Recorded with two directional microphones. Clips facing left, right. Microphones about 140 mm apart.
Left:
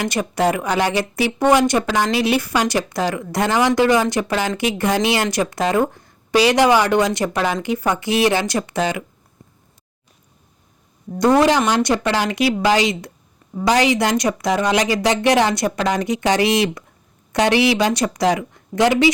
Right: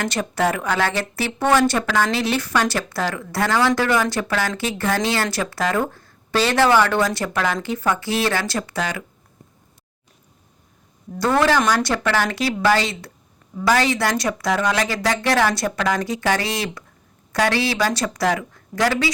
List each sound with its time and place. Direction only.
0.0 s speech: 10° left (ahead or behind)
11.2 s speech: 15° left (ahead or behind)